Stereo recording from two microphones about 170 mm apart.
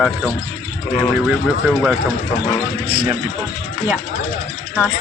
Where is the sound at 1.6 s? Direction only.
5° right (ahead or behind).